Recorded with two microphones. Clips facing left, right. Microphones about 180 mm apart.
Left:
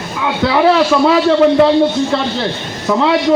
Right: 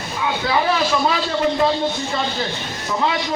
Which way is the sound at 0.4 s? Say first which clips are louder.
Left 10 dB; 70° left (ahead or behind).